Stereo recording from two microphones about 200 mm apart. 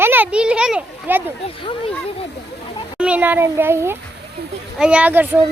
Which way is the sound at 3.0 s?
5° right (ahead or behind).